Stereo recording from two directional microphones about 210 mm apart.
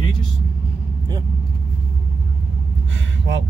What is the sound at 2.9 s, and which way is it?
Vehicle, 60° right (ahead or behind).